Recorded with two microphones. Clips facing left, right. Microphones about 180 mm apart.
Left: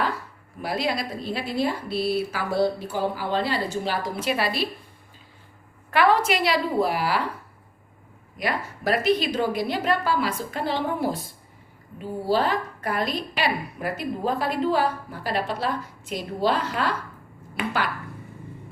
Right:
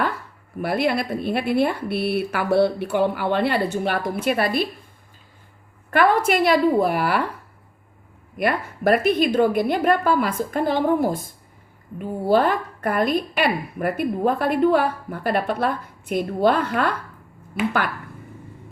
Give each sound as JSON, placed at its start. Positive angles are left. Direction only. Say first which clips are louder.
{"t": 0.6, "sound": "a woman's voice", "louder": "right 5 dB", "side_deg": -60}
{"t": 5.9, "sound": "a woman's voice", "louder": "right 2 dB", "side_deg": -50}
{"t": 8.4, "sound": "a woman's voice", "louder": "right 5 dB", "side_deg": -55}